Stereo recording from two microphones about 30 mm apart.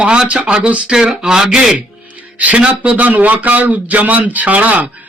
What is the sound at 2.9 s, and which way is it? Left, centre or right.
Speech, right.